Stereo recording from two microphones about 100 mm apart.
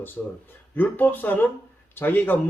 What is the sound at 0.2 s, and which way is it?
A man's voice, 15° left (ahead or behind).